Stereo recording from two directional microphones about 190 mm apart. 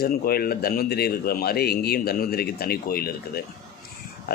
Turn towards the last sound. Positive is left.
turn(degrees=55)  # may be behind; listen again after turning